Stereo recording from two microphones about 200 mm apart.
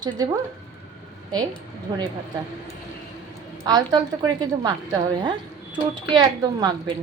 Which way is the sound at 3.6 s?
20° right (ahead or behind).